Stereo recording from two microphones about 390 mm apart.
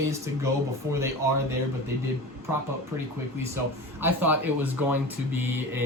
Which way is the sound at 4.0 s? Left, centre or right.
Centre.